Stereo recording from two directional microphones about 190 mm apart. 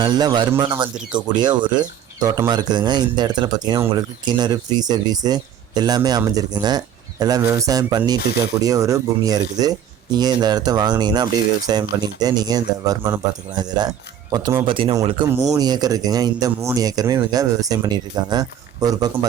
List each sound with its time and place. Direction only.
0.0 s speech: 25° right (ahead or behind)